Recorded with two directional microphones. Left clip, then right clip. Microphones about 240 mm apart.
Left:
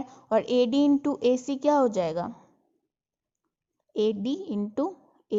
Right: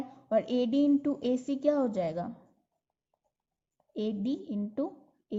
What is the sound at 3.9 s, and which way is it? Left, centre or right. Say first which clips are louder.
Speech: left 8 dB; left.